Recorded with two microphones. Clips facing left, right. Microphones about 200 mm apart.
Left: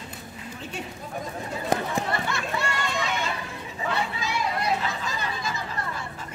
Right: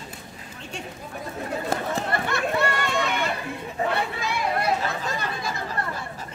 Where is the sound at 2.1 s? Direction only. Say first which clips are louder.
Right 3 dB; 55° right (ahead or behind).